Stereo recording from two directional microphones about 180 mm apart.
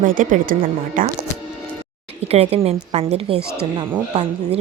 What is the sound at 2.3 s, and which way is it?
Speech, 35° right (ahead or behind).